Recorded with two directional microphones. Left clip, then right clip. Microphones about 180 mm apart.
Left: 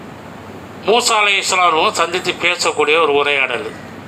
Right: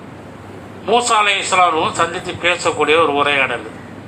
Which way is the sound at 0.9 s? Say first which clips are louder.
Left 1 dB; 50° left (ahead or behind).